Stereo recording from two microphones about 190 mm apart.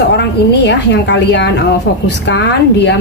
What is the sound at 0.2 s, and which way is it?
A woman's voice, 65° left (ahead or behind).